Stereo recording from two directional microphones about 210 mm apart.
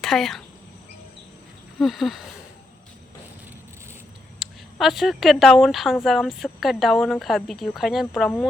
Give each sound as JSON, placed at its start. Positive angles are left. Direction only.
{"t": 0.0, "sound": "speech", "side_deg": 0}
{"t": 1.8, "sound": "speech", "side_deg": 0}
{"t": 4.4, "sound": "speech", "side_deg": 0}